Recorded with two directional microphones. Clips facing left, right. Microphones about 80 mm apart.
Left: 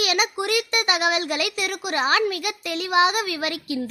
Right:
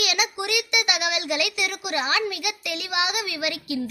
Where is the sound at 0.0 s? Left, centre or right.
Left.